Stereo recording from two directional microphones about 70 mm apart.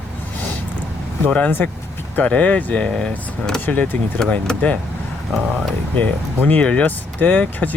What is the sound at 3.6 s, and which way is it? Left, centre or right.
Speech, left.